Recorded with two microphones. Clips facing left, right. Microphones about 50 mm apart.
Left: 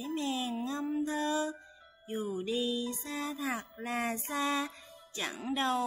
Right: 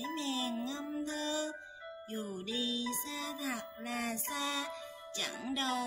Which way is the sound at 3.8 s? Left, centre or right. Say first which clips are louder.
Left 4 dB; left.